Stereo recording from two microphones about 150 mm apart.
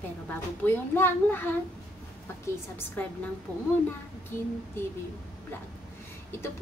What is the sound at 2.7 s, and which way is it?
Speech, 15° left (ahead or behind).